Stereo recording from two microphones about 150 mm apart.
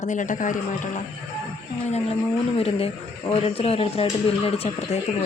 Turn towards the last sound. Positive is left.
turn(degrees=40)  # may be behind; listen again after turning